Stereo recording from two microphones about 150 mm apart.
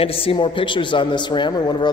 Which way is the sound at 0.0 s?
40° left (ahead or behind).